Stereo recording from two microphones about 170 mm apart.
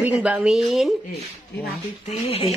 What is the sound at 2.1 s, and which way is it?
Speech, 35° left (ahead or behind).